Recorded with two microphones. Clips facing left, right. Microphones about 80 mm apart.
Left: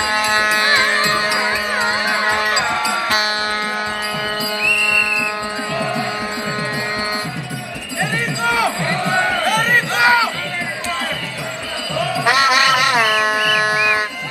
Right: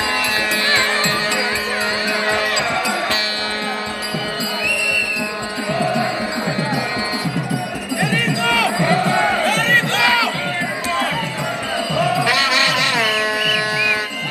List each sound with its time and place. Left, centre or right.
0.2 s music: left
2.2 s music: left
8.0 s music: left
9.5 s crowd: left
12.3 s music: left